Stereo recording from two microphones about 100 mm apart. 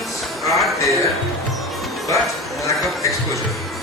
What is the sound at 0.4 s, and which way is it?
Speech, centre (ahead or behind).